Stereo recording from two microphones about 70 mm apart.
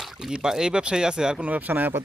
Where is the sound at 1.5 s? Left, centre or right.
Right.